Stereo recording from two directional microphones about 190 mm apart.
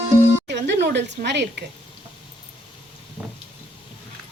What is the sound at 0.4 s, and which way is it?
Music, 65° right (ahead or behind).